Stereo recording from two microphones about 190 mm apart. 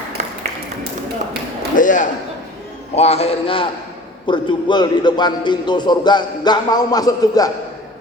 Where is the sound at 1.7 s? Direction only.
45° left (ahead or behind).